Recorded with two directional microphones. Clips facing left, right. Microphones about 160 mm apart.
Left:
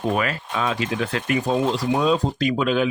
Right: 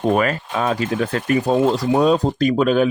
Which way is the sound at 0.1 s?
45° right (ahead or behind).